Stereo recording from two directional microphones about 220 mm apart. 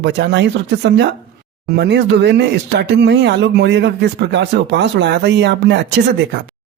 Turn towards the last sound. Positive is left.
turn(degrees=-50)  # may be behind; listen again after turning